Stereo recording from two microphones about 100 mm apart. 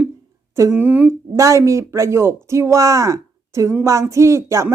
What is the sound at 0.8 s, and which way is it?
Speech, 15° right (ahead or behind).